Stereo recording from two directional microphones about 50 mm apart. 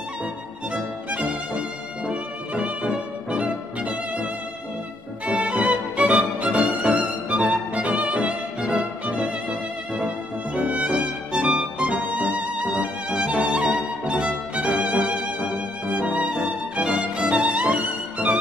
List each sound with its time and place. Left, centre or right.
2.0 s music: right